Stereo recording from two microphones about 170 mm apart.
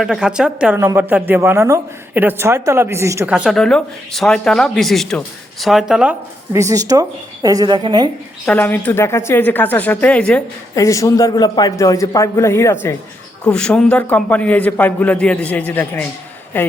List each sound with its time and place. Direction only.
0.0 s speech: 5° right (ahead or behind)
3.3 s speech: centre (ahead or behind)
6.5 s a woman's voice: 20° right (ahead or behind)
8.5 s a man's voice: 15° left (ahead or behind)
10.8 s a man's voice: 20° left (ahead or behind)